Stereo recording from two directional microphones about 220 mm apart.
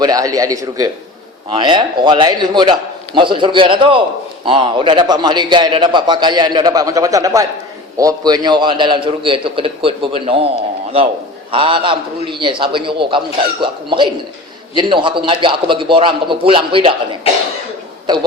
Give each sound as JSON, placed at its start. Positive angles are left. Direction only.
{"t": 0.0, "sound": "a man's voice", "side_deg": -15}
{"t": 11.5, "sound": "a man's voice", "side_deg": -25}
{"t": 18.0, "sound": "a man's voice", "side_deg": -20}